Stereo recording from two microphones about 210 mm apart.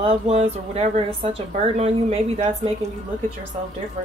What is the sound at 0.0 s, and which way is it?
Speech, 30° right (ahead or behind).